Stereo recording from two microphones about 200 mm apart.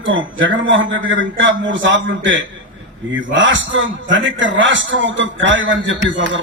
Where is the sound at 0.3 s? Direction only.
70° right (ahead or behind).